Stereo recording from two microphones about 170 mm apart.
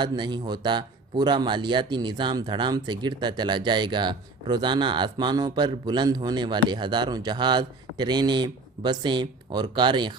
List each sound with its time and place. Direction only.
0.0 s speech: 25° right (ahead or behind)